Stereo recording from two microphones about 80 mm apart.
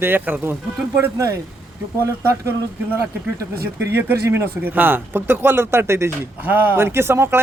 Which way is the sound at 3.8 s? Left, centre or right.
Right.